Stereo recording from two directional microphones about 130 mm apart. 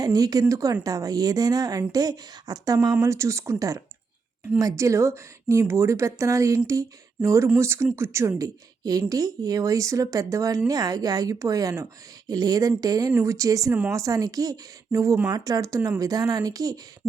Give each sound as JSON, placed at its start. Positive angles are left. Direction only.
{"t": 0.0, "sound": "a woman's voice", "side_deg": -30}